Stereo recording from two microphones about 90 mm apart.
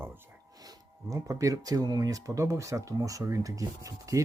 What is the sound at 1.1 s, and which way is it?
Speech, 40° right (ahead or behind).